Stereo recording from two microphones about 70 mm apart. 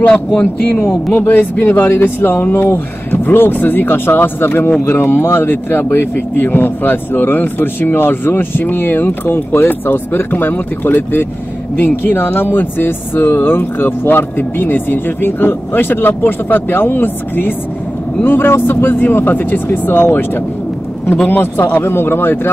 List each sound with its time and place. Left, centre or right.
1.1 s speech: left
21.3 s speech: left